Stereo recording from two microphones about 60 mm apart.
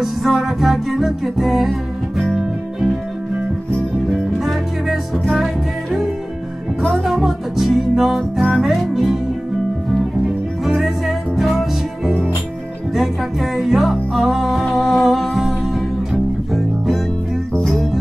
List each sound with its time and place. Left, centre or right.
0.0 s music: centre
4.1 s music: centre
10.6 s music: centre